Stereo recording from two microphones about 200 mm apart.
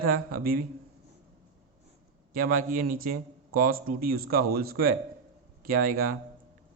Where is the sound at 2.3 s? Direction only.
45° right (ahead or behind).